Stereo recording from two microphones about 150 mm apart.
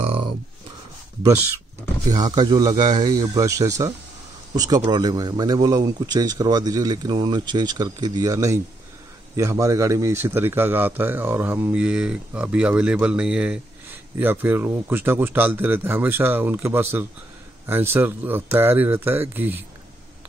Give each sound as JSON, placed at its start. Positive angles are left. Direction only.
{"t": 2.0, "sound": "a man's voice", "side_deg": -30}